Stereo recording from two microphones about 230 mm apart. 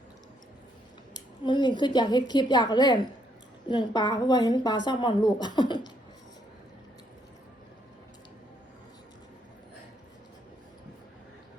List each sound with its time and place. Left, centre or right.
1.1 s a woman's voice: centre